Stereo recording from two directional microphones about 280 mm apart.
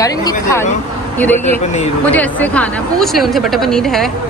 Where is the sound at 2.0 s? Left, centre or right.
Centre.